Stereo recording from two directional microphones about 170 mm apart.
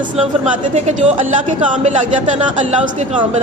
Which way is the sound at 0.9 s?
45° right (ahead or behind).